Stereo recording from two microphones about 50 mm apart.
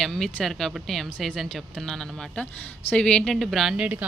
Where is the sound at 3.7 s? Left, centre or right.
Right.